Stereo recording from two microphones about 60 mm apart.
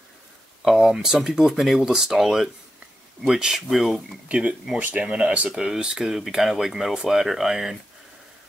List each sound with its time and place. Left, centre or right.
0.7 s speech: centre
4.3 s speech: centre
5.5 s speech: centre